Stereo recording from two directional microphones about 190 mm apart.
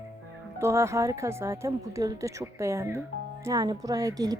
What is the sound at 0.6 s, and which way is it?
A woman's voice, 15° right (ahead or behind).